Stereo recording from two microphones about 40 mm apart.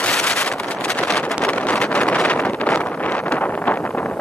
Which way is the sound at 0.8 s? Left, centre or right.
Left.